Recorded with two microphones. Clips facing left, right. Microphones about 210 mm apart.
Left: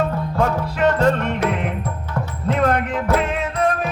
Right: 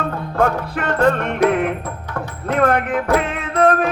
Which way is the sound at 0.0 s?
55° right (ahead or behind).